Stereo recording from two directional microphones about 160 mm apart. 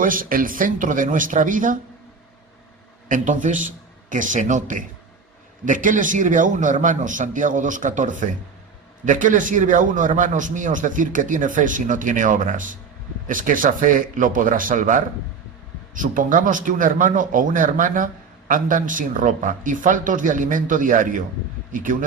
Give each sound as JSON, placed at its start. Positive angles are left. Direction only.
{"t": 0.0, "sound": "a man's voice", "side_deg": -60}
{"t": 3.1, "sound": "a man's voice", "side_deg": -55}